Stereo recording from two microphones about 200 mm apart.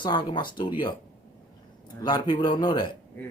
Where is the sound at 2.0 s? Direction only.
20° left (ahead or behind).